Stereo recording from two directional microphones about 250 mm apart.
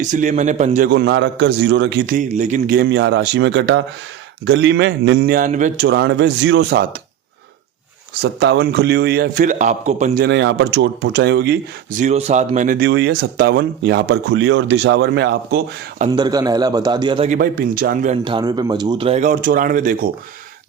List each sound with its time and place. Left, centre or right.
0.0 s speech: right
0.9 s a man's voice: right
5.9 s speech: right
8.2 s a man's voice: right
10.2 s speech: right
11.9 s speech: right
16.0 s a man's voice: centre
17.2 s a man's voice: right
18.3 s speech: centre; by 20.1 s right